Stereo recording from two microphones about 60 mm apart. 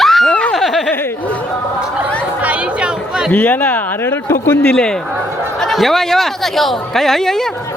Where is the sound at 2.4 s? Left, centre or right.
Right.